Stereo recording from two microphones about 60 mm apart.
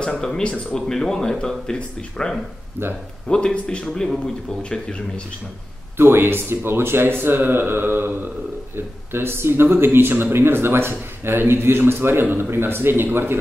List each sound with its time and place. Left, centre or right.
0.2 s speech: centre
2.8 s speech: right
3.3 s speech: centre
5.9 s speech: right